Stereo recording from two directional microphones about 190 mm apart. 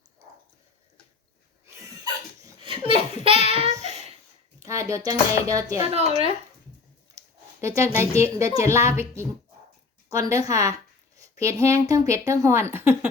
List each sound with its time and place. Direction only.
2.0 s a sound: 20° right (ahead or behind)
4.6 s speech: 15° right (ahead or behind)
5.9 s speech: 30° right (ahead or behind)
7.2 s a woman's voice: 15° right (ahead or behind)